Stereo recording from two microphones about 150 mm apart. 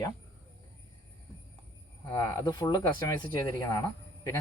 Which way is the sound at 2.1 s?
25° left (ahead or behind).